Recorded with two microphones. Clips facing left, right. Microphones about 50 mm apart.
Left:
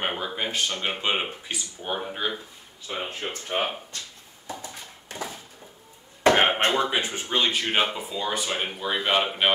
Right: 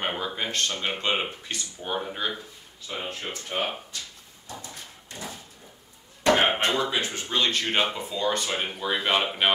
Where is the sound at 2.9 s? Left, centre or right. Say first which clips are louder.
Left 2 dB; left.